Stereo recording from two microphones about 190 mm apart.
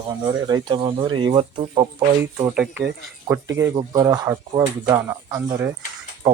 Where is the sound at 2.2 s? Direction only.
10° right (ahead or behind).